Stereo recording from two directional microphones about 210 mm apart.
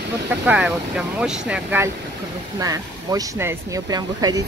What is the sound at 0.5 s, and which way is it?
Speech, 5° right (ahead or behind).